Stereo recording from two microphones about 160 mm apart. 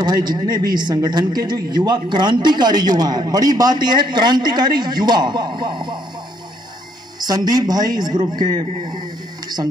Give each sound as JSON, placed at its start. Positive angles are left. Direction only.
{"t": 0.0, "sound": "a man's voice", "side_deg": -25}
{"t": 7.2, "sound": "a man's voice", "side_deg": -25}